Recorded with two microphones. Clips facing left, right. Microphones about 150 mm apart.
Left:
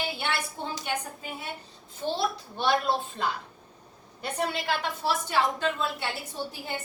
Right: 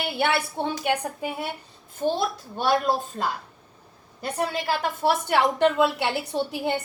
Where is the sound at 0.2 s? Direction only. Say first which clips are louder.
Right 8 dB; 65° right (ahead or behind).